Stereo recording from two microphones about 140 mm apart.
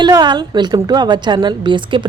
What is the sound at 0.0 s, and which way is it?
A woman's voice, 30° right (ahead or behind).